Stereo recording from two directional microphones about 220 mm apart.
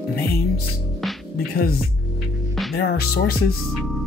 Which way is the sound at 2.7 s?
45° left (ahead or behind).